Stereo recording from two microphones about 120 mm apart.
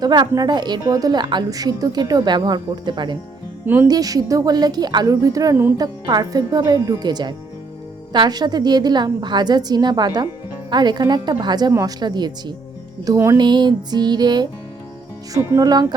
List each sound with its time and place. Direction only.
0.0 s a woman's voice: 35° right (ahead or behind)
15.3 s a woman's voice: 25° right (ahead or behind)